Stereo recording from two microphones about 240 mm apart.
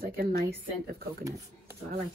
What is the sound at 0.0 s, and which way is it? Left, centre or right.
Speech, right.